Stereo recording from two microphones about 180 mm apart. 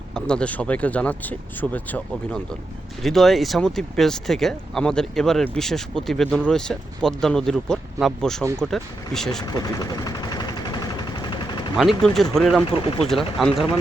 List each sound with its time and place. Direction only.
0.1 s speech: 5° left (ahead or behind)
9.4 s vehicle: 20° left (ahead or behind)
12.0 s speech: centre (ahead or behind)